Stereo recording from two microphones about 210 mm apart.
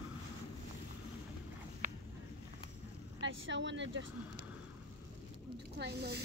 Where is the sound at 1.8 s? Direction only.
40° right (ahead or behind).